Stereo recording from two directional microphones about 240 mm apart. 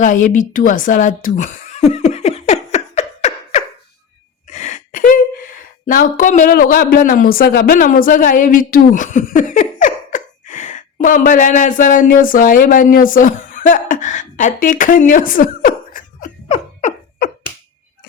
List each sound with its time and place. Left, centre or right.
0.0 s chuckle: left
4.5 s a sound: left
5.8 s speech: left